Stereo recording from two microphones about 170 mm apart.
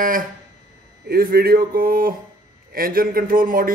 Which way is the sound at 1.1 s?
65° right (ahead or behind).